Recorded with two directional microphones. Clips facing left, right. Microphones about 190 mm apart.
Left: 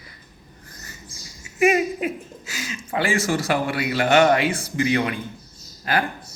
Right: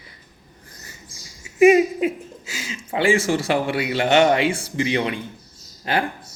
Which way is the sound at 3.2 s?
25° right (ahead or behind).